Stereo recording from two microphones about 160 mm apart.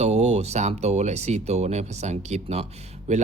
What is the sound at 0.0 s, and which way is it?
Speech, 45° right (ahead or behind).